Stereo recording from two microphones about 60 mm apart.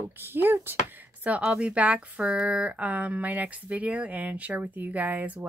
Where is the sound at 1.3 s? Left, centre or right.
Right.